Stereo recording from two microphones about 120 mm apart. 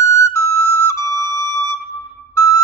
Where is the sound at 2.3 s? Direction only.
25° left (ahead or behind).